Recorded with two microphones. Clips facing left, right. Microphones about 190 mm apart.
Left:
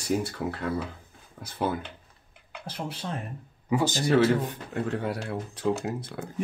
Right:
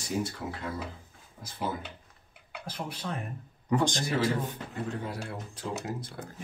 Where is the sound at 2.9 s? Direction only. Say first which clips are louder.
Left 1 dB; 25° left (ahead or behind).